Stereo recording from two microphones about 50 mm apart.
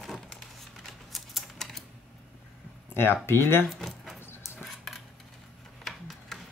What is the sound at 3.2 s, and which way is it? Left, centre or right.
Speech, left.